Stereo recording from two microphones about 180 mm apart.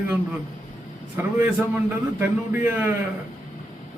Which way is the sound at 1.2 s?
15° right (ahead or behind).